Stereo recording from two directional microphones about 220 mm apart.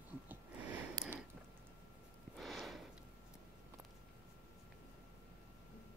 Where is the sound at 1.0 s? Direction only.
20° right (ahead or behind).